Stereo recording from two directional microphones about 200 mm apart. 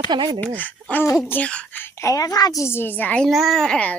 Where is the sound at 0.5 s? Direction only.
10° left (ahead or behind).